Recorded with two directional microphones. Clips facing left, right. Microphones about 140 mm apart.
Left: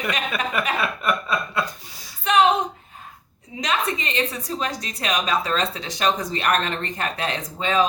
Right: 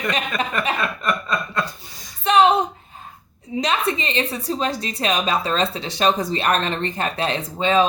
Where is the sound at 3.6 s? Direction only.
30° right (ahead or behind).